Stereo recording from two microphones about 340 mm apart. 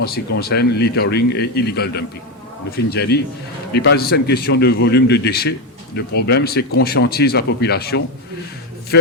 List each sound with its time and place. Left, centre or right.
0.3 s a man's voice: left